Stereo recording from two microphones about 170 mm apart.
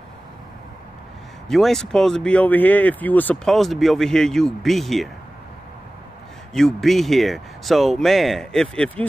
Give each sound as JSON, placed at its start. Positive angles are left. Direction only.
{"t": 1.5, "sound": "speech", "side_deg": 0}
{"t": 6.5, "sound": "speech", "side_deg": 0}